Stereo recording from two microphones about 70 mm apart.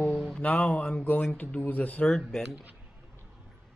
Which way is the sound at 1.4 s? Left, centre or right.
Left.